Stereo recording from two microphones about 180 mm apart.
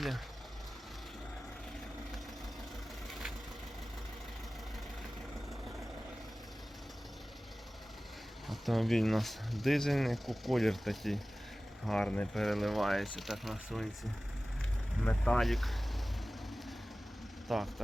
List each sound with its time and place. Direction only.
3.1 s vehicle: centre (ahead or behind)
8.4 s speech: centre (ahead or behind)
17.5 s speech: centre (ahead or behind)